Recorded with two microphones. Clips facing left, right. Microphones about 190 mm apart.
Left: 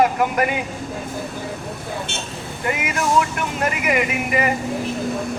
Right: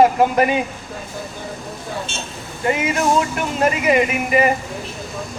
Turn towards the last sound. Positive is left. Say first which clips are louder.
# right 4 dB
turn(degrees=-25)  # may be behind; listen again after turning